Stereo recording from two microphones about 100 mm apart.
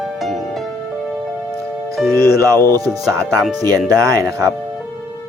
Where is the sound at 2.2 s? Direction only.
35° right (ahead or behind).